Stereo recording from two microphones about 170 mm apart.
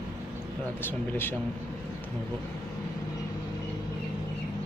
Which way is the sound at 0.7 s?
10° left (ahead or behind).